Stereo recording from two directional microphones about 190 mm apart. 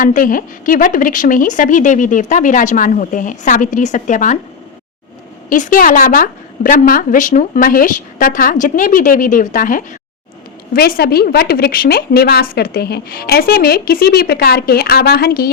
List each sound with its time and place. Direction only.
0.0 s a woman's voice: 45° left (ahead or behind)
5.5 s a woman's voice: 45° left (ahead or behind)